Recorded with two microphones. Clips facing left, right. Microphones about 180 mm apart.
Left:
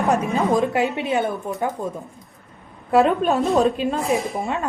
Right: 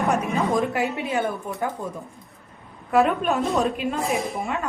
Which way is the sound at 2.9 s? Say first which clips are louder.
Left 3 dB; 30° left (ahead or behind).